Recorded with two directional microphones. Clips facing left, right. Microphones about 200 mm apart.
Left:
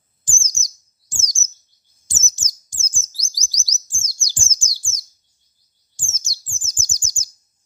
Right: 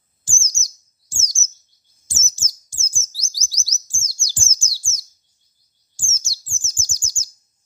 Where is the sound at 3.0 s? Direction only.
15° left (ahead or behind).